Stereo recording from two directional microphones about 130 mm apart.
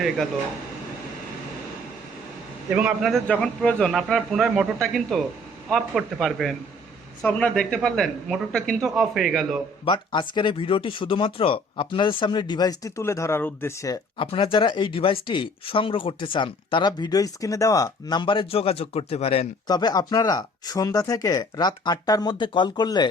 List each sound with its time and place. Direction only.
2.7 s a man's voice: 10° right (ahead or behind)
3.1 s speech: 5° left (ahead or behind)
9.8 s speech: 40° left (ahead or behind)
14.2 s speech: 45° left (ahead or behind)
19.6 s speech: 30° left (ahead or behind)